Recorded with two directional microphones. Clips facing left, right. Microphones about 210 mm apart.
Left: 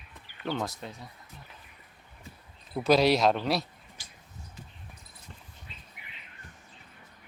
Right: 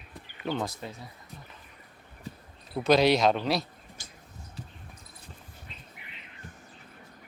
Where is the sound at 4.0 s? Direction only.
45° right (ahead or behind).